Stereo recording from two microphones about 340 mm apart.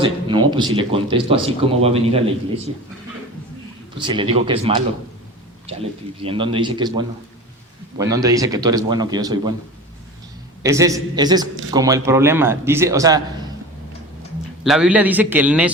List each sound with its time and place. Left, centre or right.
0.0 s a man's voice: centre
3.9 s a man's voice: centre
6.2 s a man's voice: centre
10.6 s a man's voice: centre
14.6 s a man's voice: centre